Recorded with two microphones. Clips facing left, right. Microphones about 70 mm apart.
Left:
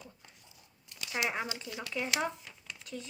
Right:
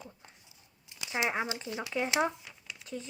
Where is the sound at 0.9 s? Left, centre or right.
Centre.